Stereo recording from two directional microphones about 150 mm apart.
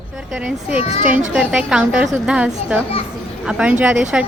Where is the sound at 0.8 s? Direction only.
45° left (ahead or behind).